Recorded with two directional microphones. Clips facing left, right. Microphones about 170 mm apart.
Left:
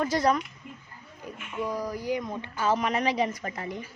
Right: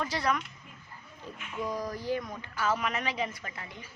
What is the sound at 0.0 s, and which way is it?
Speech, 45° left (ahead or behind).